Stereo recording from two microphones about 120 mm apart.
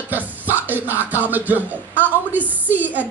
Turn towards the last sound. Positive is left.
turn(degrees=-15)  # may be behind; listen again after turning